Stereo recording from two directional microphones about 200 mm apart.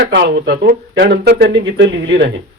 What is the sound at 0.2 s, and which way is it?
A man's voice, 55° right (ahead or behind).